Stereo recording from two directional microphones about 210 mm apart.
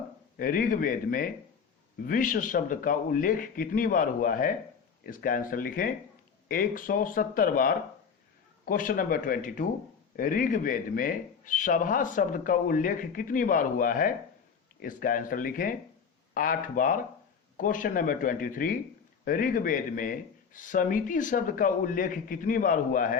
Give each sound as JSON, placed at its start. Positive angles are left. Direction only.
{"t": 0.3, "sound": "a man's voice", "side_deg": 45}